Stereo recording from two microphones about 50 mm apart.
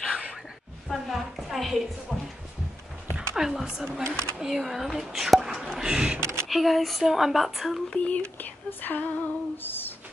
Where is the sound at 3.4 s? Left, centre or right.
Centre.